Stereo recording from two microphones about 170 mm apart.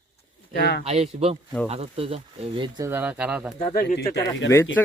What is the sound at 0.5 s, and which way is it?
Speech, 70° left (ahead or behind).